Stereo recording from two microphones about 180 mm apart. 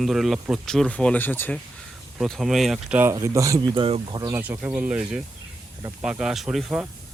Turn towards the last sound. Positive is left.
turn(degrees=-5)  # may be behind; listen again after turning